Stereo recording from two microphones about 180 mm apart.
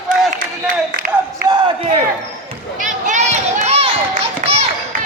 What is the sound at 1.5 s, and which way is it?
Crowd, 25° right (ahead or behind).